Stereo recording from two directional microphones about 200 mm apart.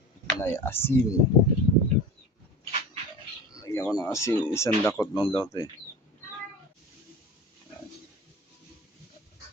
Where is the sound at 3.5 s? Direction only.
15° left (ahead or behind).